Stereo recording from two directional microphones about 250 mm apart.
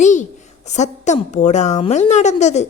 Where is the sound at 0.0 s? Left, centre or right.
Left.